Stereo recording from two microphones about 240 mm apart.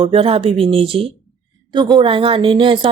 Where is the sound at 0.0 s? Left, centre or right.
Right.